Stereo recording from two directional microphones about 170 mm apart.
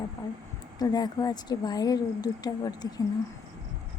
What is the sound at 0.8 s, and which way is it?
A woman's voice, 25° left (ahead or behind).